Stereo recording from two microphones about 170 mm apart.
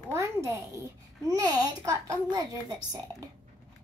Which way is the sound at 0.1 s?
15° right (ahead or behind).